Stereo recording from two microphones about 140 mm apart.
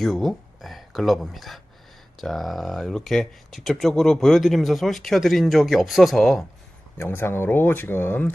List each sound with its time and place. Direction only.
0.0 s speech: centre (ahead or behind)
7.0 s speech: 15° left (ahead or behind)